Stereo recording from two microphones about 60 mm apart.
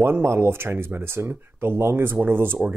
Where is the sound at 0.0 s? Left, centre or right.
Right.